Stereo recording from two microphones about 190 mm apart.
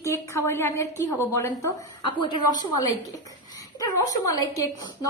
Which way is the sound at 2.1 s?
25° left (ahead or behind).